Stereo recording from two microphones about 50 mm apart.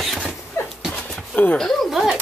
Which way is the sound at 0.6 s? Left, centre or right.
Left.